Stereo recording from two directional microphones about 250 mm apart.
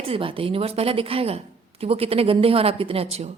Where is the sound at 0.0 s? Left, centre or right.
Right.